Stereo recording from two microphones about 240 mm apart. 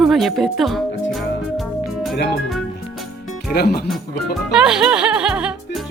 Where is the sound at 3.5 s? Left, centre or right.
Left.